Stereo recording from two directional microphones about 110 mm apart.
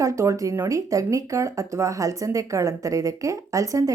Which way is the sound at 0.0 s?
30° right (ahead or behind).